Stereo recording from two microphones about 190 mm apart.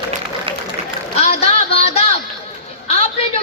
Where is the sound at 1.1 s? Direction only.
30° left (ahead or behind).